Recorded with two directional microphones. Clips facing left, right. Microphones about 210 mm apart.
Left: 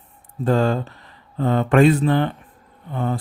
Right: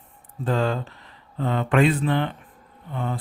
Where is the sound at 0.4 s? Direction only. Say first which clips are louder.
Left 5 dB; 45° left (ahead or behind).